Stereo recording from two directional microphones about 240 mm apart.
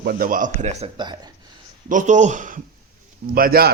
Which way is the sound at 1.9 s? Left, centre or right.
Right.